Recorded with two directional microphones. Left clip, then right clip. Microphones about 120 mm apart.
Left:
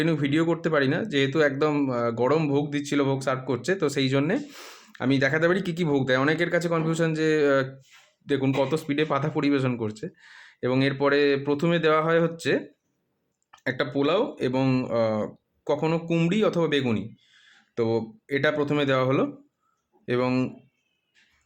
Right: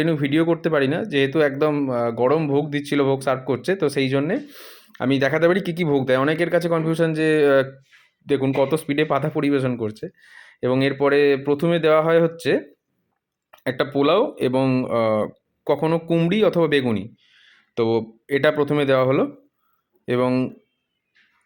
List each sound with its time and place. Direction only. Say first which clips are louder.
0.0 s speech: right 4 dB; 20° right (ahead or behind)
4.2 s speech: right 2 dB; 5° right (ahead or behind)
4.9 s speech: right 4 dB; 25° right (ahead or behind)